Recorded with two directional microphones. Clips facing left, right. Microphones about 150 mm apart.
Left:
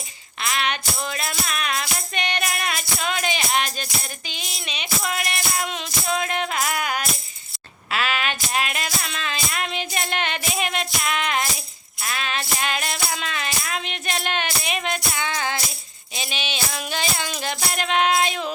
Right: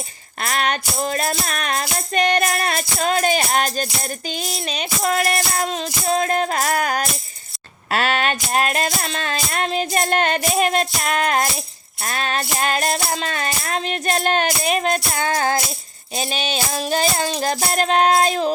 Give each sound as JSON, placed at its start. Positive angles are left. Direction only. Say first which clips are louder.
{"t": 0.4, "sound": "music", "louder": "right 3 dB", "side_deg": -45}